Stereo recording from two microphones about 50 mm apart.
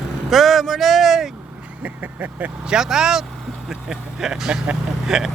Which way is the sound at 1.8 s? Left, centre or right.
Right.